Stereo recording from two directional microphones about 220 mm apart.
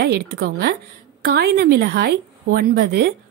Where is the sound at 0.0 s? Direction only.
50° right (ahead or behind).